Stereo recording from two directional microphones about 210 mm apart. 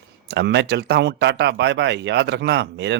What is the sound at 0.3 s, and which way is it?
Speech, 55° right (ahead or behind).